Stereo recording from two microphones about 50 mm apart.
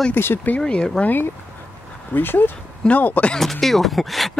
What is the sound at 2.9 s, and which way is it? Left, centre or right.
Speech, left.